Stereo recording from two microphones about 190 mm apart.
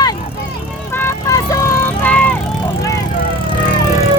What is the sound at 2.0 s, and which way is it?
Vehicle, 10° left (ahead or behind).